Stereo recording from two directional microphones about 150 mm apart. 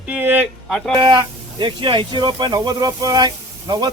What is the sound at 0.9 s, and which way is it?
Speech, 30° right (ahead or behind).